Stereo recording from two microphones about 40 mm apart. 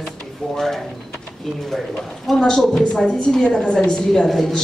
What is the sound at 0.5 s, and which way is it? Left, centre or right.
A man's voice, centre.